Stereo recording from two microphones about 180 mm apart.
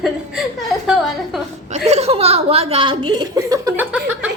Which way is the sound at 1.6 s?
40° right (ahead or behind).